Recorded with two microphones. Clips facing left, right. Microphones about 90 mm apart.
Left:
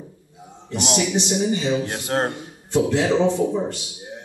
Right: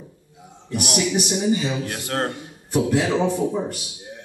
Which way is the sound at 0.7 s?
25° left (ahead or behind).